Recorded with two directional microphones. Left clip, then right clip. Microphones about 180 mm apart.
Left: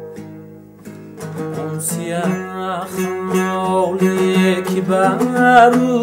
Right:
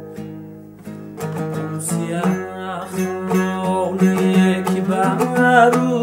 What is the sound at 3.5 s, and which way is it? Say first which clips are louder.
Music: left 3 dB; 35° left (ahead or behind).